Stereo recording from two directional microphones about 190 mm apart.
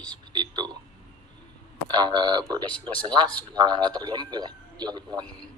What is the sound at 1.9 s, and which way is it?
A man's voice, 25° right (ahead or behind).